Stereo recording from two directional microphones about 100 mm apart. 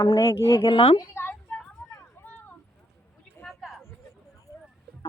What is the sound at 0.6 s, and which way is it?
Speech, 55° left (ahead or behind).